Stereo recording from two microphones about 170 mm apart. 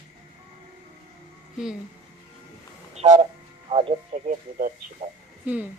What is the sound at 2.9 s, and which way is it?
Speech, 40° right (ahead or behind).